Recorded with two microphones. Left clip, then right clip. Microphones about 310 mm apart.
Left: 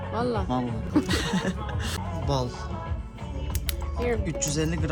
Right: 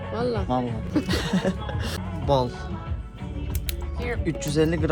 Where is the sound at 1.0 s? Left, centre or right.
Centre.